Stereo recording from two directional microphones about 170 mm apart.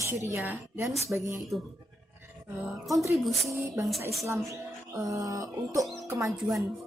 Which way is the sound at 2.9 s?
Centre (ahead or behind).